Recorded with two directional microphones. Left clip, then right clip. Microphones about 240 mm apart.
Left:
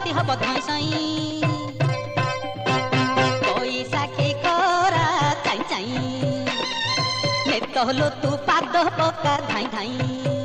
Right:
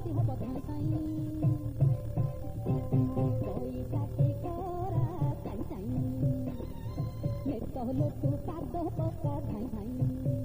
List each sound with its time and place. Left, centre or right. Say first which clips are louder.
0.1 s music: left 18 dB; right
2.7 s music: left 14 dB; right
6.9 s music: left 19 dB; centre
7.7 s music: left 15 dB; right